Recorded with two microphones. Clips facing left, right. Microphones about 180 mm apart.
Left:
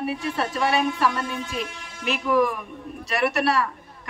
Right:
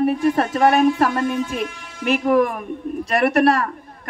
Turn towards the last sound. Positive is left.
turn(degrees=-50)  # may be behind; listen again after turning